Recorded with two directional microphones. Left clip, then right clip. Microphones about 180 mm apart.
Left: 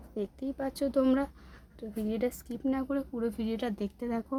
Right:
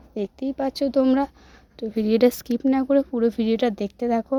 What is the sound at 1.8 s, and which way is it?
A woman's voice, 45° right (ahead or behind).